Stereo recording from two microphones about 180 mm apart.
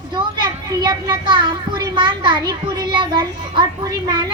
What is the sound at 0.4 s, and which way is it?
A child's voice, 25° right (ahead or behind).